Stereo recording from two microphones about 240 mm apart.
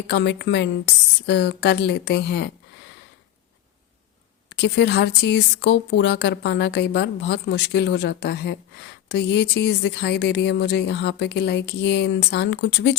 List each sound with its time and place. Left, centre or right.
0.1 s speech: left
4.4 s speech: left